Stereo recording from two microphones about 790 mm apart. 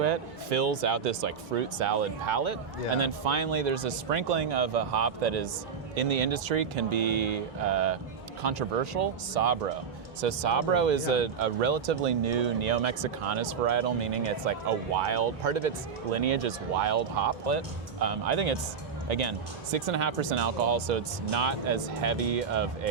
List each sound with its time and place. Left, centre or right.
0.5 s speech: right
1.5 s speech: right
6.0 s speech: right
8.4 s speech: right
15.0 s speech: right